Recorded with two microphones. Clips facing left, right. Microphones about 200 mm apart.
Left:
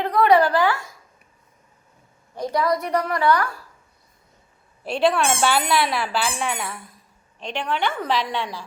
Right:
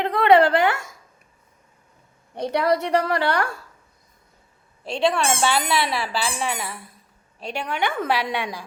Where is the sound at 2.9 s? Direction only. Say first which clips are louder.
Left 1 dB; 30° right (ahead or behind).